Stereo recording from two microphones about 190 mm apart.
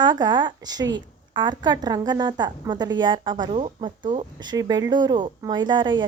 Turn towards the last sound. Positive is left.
turn(degrees=-25)  # may be behind; listen again after turning